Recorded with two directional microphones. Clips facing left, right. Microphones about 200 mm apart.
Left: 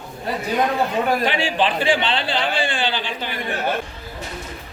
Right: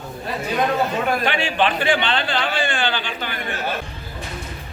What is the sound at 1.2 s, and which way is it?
A man's voice, 30° left (ahead or behind).